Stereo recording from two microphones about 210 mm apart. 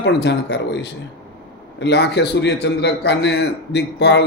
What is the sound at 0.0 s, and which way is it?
A man's voice, 55° left (ahead or behind).